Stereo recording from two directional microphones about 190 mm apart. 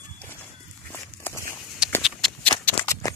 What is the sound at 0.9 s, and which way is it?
Walk, 10° left (ahead or behind).